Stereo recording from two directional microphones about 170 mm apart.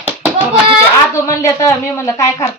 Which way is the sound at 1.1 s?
15° left (ahead or behind).